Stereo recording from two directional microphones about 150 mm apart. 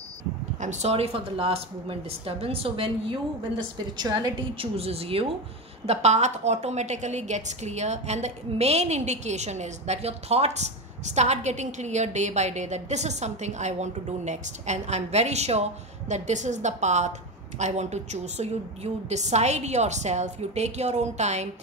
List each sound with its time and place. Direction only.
0.6 s speech: 50° right (ahead or behind)
4.0 s a woman's voice: 25° right (ahead or behind); by 21.5 s 50° right (ahead or behind)